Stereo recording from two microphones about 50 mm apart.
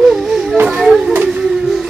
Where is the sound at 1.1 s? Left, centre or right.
Right.